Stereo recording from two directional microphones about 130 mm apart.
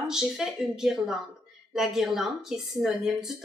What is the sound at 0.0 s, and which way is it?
A woman's voice, 5° right (ahead or behind).